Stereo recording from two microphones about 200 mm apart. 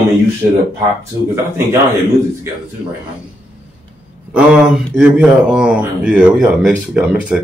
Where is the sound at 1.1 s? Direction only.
15° right (ahead or behind).